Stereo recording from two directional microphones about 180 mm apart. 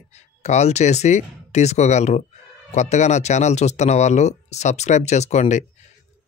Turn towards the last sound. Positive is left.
turn(degrees=40)  # may be behind; listen again after turning